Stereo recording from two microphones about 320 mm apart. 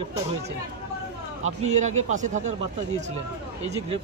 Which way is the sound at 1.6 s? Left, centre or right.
Right.